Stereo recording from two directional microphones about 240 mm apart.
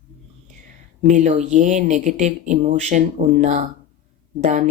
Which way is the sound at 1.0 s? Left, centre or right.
Right.